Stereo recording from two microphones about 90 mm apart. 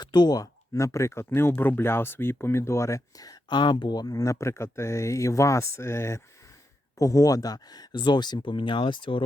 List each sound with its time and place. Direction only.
0.0 s speech: 55° left (ahead or behind); by 6.2 s 30° left (ahead or behind)
7.0 s speech: 40° left (ahead or behind); by 9.2 s 70° left (ahead or behind)